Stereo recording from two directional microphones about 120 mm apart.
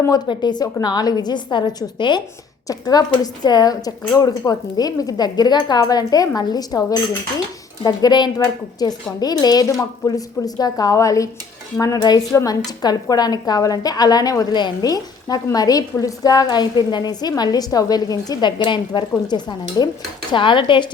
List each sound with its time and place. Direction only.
0.3 s a woman's voice: 35° left (ahead or behind)